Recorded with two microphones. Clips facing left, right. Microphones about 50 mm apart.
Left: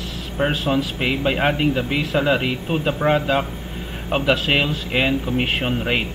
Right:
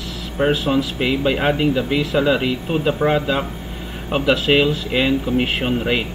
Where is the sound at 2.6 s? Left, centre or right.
Centre.